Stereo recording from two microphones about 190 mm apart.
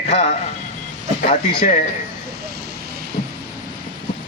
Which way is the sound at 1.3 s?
30° left (ahead or behind).